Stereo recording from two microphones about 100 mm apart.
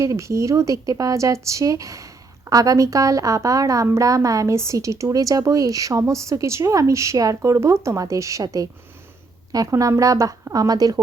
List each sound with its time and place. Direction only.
0.0 s a woman's voice: 30° right (ahead or behind)